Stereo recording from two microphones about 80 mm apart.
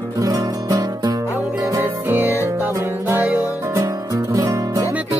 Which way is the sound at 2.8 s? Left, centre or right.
Right.